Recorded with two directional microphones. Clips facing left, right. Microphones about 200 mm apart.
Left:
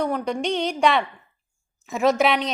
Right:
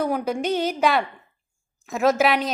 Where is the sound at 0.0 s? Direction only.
5° right (ahead or behind).